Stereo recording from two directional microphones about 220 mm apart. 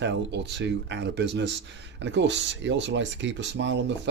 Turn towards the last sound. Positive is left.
turn(degrees=-55)  # may be behind; listen again after turning